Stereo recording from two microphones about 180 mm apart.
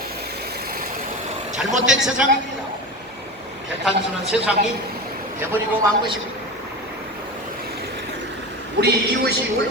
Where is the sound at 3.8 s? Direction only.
5° right (ahead or behind).